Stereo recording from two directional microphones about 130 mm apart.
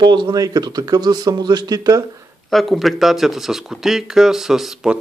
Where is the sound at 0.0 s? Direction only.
35° right (ahead or behind).